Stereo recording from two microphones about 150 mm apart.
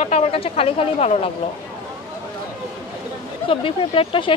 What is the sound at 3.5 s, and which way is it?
Speech, 40° left (ahead or behind).